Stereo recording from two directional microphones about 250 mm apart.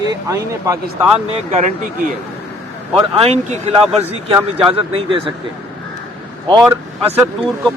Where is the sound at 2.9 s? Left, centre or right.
Right.